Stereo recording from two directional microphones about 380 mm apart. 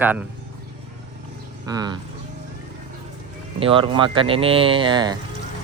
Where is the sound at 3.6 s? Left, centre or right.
Centre.